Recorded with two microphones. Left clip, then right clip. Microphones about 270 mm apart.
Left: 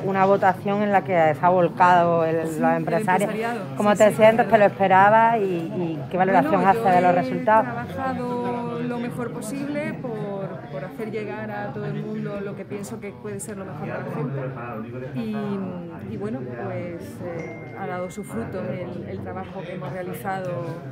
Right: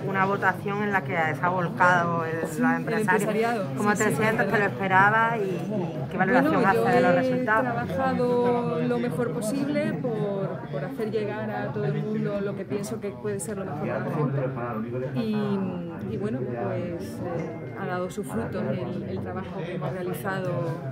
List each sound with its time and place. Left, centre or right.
0.1 s speech: left
3.3 s a man's voice: centre
3.9 s speech: left
7.6 s a man's voice: centre